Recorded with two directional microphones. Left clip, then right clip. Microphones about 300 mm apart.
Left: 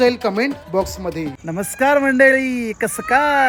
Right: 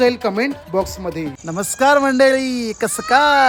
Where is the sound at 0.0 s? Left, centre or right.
Centre.